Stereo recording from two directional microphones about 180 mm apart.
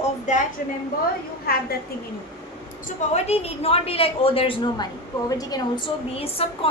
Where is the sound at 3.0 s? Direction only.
35° left (ahead or behind); by 5.8 s 20° left (ahead or behind).